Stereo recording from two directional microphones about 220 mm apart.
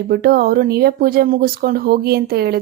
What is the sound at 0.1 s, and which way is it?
Speech, 45° right (ahead or behind).